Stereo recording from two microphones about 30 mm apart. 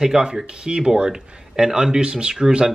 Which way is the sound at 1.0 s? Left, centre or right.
Right.